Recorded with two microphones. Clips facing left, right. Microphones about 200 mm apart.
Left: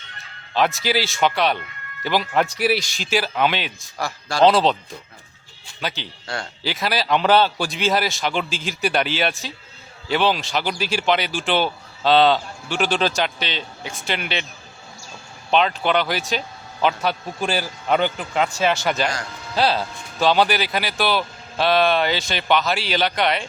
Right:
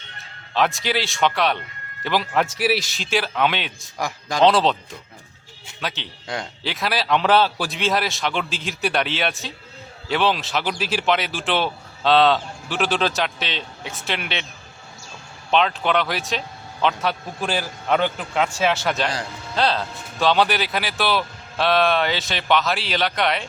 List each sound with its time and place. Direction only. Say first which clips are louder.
0.5 s speech: left 1 dB; centre (ahead or behind)
3.9 s speech: even; 15° right (ahead or behind)
4.4 s speech: left 1 dB; centre (ahead or behind)
6.2 s speech: right 1 dB; 15° right (ahead or behind)
6.6 s speech: left 2 dB; centre (ahead or behind)
15.4 s speech: left 1 dB; centre (ahead or behind)